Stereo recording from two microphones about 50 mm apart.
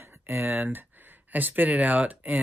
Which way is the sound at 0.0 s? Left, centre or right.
Right.